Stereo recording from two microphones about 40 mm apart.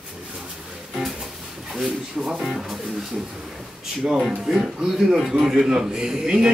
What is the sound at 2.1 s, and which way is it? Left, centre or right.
Speech, centre.